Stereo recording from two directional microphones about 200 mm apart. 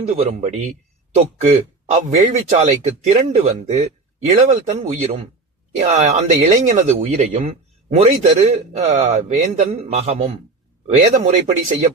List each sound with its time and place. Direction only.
0.1 s speech: 35° right (ahead or behind)